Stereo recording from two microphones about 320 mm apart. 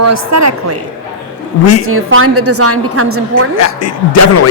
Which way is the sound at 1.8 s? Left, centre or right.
Right.